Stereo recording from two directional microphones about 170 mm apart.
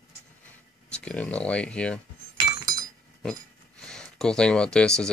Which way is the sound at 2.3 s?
25° right (ahead or behind).